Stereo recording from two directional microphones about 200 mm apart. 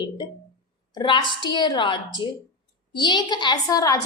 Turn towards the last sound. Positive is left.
turn(degrees=20)  # may be behind; listen again after turning